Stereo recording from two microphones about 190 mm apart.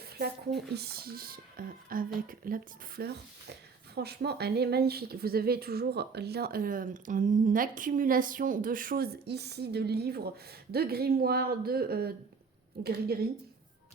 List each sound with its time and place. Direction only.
0.2 s speech: 60° right (ahead or behind)